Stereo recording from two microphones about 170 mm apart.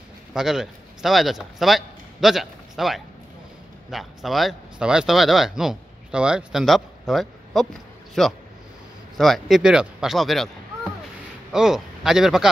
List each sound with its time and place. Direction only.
0.3 s a man's voice: 5° right (ahead or behind)